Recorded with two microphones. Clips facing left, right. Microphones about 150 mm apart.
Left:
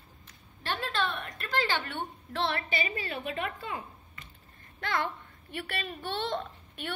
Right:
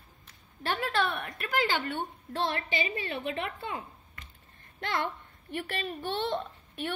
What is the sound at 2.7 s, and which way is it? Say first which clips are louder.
A woman's voice: right 1 dB; 25° right (ahead or behind).